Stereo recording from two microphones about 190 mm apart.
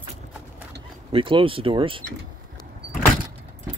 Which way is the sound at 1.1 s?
25° right (ahead or behind).